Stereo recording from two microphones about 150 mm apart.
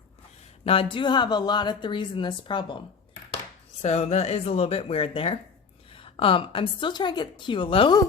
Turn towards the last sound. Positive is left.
turn(degrees=35)  # may be behind; listen again after turning